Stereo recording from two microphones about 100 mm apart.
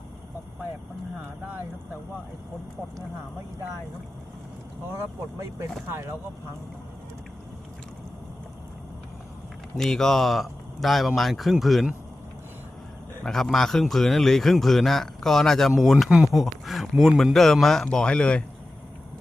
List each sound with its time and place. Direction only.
5.4 s speech: 30° right (ahead or behind)
9.7 s a man's voice: 5° left (ahead or behind)
13.2 s a man's voice: 5° left (ahead or behind)